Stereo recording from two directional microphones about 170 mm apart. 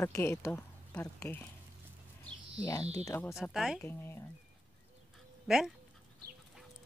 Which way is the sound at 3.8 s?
15° left (ahead or behind).